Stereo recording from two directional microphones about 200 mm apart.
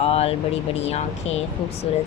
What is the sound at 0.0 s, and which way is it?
Speech, 30° left (ahead or behind).